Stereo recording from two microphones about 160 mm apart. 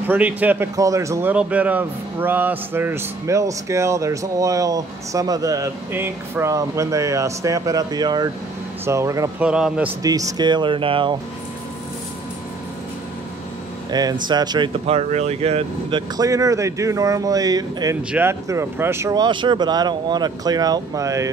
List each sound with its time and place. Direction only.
0.0 s speech: 10° right (ahead or behind)
1.3 s speech: 10° right (ahead or behind)
9.4 s speech: 5° right (ahead or behind)
10.0 s speech: 20° right (ahead or behind)
13.8 s speech: 25° right (ahead or behind)
14.9 s speech: 40° right (ahead or behind)
16.2 s speech: 20° right (ahead or behind)